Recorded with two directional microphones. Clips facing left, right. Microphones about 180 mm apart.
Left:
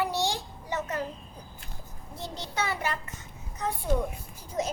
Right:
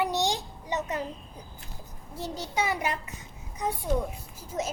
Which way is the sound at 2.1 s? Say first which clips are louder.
Right 3 dB; 10° right (ahead or behind).